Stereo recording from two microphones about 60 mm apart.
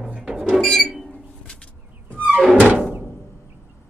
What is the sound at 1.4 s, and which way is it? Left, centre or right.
Vehicle, centre.